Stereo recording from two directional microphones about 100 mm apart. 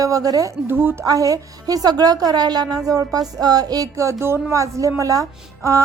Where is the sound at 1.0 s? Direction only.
35° right (ahead or behind).